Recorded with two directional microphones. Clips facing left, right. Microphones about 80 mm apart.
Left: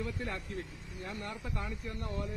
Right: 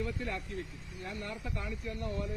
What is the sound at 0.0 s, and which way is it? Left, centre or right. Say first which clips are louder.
Speech: right 1 dB; left.